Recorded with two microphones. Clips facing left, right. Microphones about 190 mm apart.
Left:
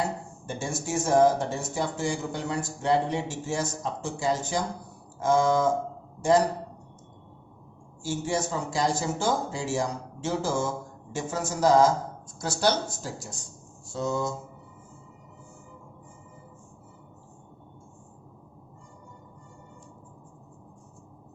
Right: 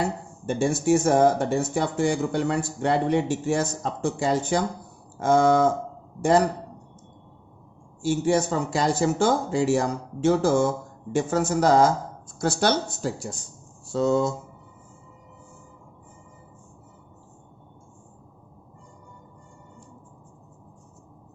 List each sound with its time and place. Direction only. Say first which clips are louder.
0.4 s speech: right 11 dB; 60° right (ahead or behind)
8.0 s speech: right 7 dB; 60° right (ahead or behind)